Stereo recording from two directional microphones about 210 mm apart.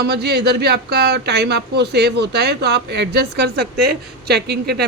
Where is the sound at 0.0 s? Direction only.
50° right (ahead or behind).